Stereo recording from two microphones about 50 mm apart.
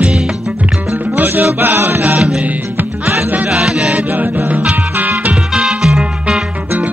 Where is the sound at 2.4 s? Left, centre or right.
Right.